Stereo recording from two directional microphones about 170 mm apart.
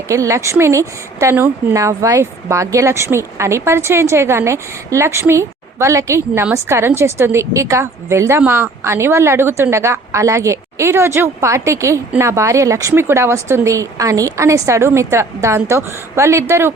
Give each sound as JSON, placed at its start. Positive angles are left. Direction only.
{"t": 0.1, "sound": "a woman's voice", "side_deg": -15}